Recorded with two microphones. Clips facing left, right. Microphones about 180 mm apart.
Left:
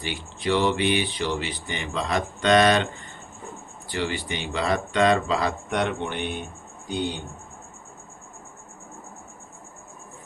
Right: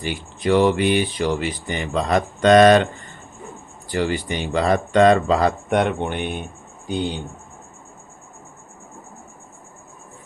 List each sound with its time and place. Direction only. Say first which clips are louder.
0.0 s speech: right 5 dB; 45° right (ahead or behind)
3.9 s speech: right 6 dB; 45° right (ahead or behind)